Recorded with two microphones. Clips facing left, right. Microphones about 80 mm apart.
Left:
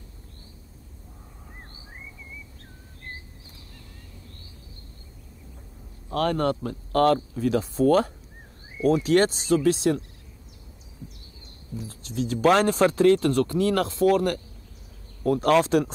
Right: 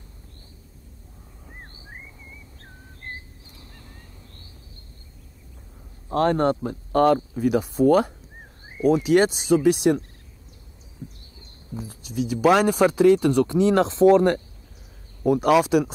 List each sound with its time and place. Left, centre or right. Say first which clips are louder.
6.0 s speech: right 4 dB; right
11.9 s speech: right 2 dB; centre
15.2 s speech: right 2 dB; centre